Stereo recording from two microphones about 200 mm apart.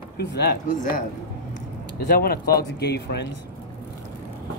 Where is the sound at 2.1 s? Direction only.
50° left (ahead or behind).